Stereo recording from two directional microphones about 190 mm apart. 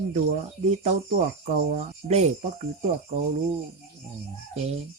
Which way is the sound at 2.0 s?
40° right (ahead or behind).